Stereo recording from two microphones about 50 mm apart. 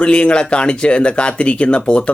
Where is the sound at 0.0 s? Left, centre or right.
Left.